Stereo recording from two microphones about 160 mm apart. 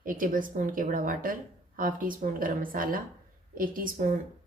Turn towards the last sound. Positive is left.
turn(degrees=-55)  # may be behind; listen again after turning